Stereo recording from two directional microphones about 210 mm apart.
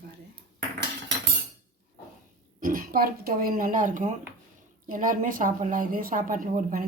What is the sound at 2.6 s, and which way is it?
Speech, 40° right (ahead or behind).